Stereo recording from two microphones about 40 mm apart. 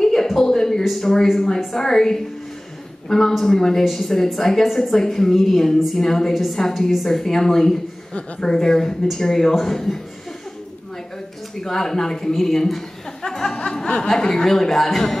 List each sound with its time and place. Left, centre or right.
0.0 s a sound: centre
0.8 s a woman's voice: centre
11.6 s a man's voice: centre
13.6 s a woman's voice: left; by 15.1 s centre